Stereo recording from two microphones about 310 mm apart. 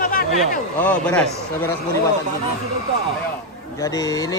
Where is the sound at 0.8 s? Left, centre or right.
Centre.